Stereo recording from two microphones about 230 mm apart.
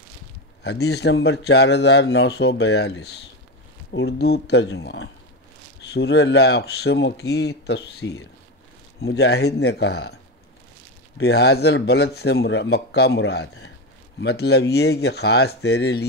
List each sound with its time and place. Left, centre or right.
0.7 s a man's voice: left
11.1 s a man's voice: left